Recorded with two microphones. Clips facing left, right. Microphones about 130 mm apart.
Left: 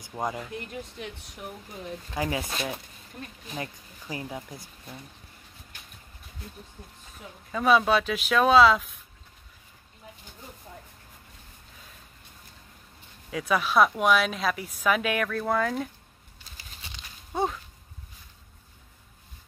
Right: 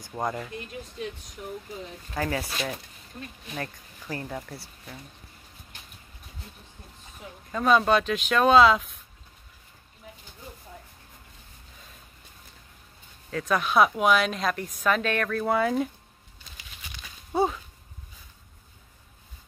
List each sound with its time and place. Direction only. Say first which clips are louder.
0.1 s a woman's voice: right 1 dB; 5° left (ahead or behind)
2.1 s speech: right 1 dB; 15° left (ahead or behind)
7.5 s a woman's voice: even; centre (ahead or behind)
13.3 s a woman's voice: even; 10° left (ahead or behind)
15.2 s a woman's voice: right 2 dB; 5° right (ahead or behind)
16.5 s a sound: even; 30° left (ahead or behind)
17.3 s a sound: right 3 dB; 5° right (ahead or behind)